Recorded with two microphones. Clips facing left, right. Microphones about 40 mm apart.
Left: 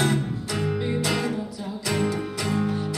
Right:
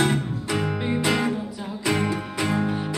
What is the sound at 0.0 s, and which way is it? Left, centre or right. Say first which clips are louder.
Music: right 1 dB; right.